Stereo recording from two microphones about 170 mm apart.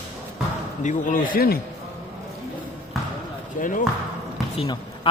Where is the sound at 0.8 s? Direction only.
50° left (ahead or behind).